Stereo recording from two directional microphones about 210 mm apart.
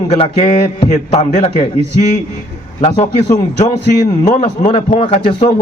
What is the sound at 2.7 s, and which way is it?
Speech, 30° left (ahead or behind).